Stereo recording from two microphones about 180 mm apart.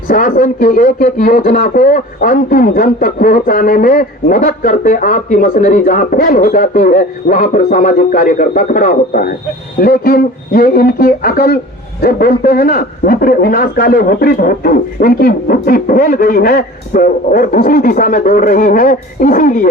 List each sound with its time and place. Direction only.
0.1 s speech: 50° left (ahead or behind)